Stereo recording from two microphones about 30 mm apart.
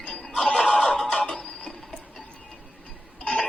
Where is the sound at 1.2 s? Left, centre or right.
Left.